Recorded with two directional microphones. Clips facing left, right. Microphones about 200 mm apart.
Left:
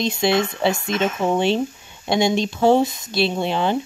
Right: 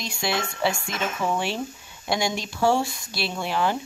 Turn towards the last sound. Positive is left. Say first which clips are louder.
# left 5 dB
turn(degrees=25)  # may be behind; listen again after turning